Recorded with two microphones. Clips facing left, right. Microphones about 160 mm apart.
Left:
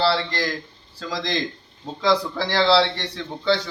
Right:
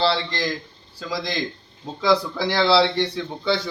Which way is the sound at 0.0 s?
20° right (ahead or behind).